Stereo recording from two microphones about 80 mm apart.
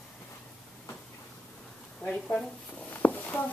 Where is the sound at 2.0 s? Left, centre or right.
Centre.